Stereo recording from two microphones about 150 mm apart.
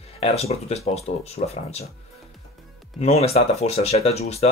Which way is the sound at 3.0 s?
45° left (ahead or behind).